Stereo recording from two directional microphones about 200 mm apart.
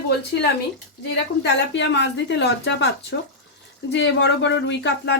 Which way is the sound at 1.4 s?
60° left (ahead or behind).